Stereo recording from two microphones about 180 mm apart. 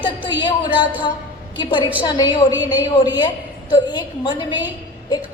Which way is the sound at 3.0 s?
25° left (ahead or behind).